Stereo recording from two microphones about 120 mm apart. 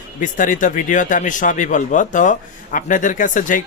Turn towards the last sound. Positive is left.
turn(degrees=90)